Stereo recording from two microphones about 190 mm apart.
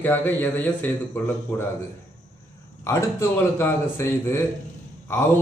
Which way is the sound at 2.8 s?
15° left (ahead or behind).